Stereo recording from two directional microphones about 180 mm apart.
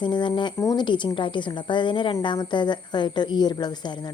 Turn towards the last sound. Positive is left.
turn(degrees=25)  # may be behind; listen again after turning